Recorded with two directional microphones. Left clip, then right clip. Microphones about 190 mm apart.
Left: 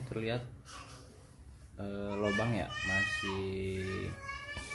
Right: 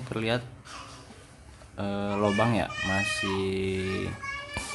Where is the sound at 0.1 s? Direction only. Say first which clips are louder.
Right 8 dB; 25° right (ahead or behind).